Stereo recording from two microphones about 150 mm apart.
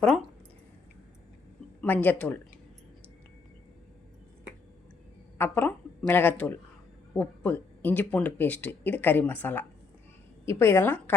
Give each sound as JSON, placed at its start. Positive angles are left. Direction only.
{"t": 1.8, "sound": "speech", "side_deg": 10}
{"t": 5.4, "sound": "speech", "side_deg": 10}